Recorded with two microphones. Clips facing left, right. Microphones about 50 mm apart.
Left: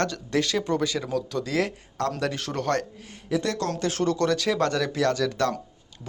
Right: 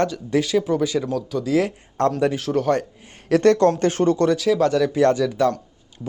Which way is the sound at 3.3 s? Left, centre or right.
Right.